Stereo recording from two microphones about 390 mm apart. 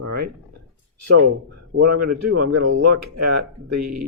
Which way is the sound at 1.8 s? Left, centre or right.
Right.